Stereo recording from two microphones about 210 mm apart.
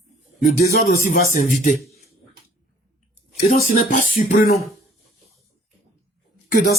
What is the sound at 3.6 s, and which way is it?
Speech, 35° left (ahead or behind).